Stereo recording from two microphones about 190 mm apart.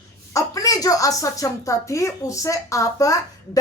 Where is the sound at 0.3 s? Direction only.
20° left (ahead or behind).